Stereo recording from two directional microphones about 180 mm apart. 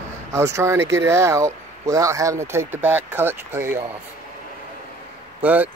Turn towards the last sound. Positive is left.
turn(degrees=-10)  # may be behind; listen again after turning